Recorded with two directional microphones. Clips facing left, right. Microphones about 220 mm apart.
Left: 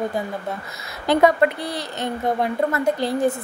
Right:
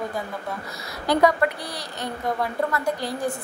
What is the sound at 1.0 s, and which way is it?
A woman's voice, 25° left (ahead or behind).